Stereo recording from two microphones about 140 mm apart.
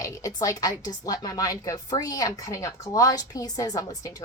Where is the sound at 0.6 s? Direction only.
25° left (ahead or behind).